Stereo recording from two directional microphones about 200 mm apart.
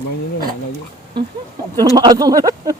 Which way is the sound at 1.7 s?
20° right (ahead or behind).